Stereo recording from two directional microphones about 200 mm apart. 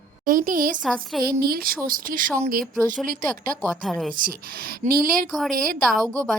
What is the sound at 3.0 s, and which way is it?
Speech, 45° right (ahead or behind).